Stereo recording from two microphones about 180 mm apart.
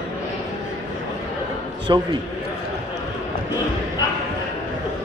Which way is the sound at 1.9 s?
25° right (ahead or behind).